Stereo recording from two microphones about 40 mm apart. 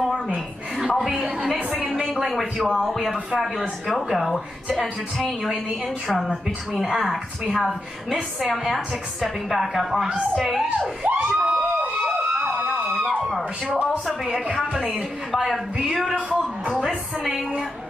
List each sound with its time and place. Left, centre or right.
0.7 s music: centre
1.8 s a sound: centre
2.1 s a woman's voice: centre
6.7 s a woman's voice: centre
11.1 s a sound: right
11.5 s emergency vehicle: right
12.4 s emergency vehicle: right
14.2 s a woman's voice: centre